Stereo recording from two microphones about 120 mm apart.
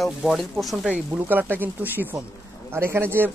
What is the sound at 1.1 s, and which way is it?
Speech, 15° right (ahead or behind).